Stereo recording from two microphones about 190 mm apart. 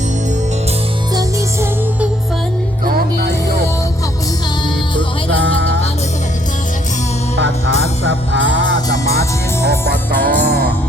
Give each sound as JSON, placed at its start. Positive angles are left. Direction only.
{"t": 2.8, "sound": "music", "side_deg": -50}
{"t": 8.0, "sound": "music", "side_deg": -70}
{"t": 10.2, "sound": "music", "side_deg": -55}